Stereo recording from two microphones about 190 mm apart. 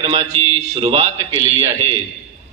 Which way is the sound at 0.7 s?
30° right (ahead or behind).